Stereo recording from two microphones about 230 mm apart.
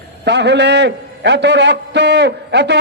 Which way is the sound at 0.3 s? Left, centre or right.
Right.